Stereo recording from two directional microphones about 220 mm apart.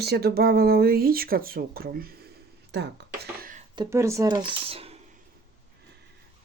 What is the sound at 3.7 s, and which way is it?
Speech, 15° right (ahead or behind).